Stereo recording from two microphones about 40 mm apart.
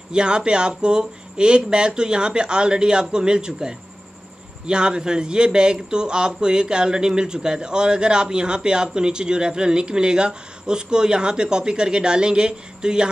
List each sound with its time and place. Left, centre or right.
0.1 s a man's voice: right
4.6 s a man's voice: right